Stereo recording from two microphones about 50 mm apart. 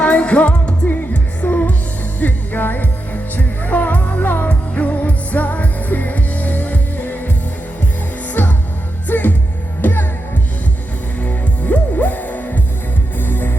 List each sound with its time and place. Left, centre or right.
0.0 s music: left
8.3 s music: left
11.2 s music: left